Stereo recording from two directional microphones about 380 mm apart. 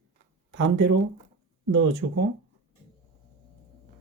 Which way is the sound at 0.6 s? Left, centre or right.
Right.